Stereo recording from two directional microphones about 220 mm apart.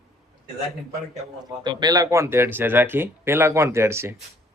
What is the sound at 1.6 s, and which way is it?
Speech, 20° right (ahead or behind).